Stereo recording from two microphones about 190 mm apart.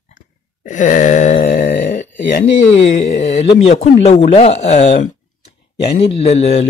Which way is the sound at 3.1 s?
40° left (ahead or behind).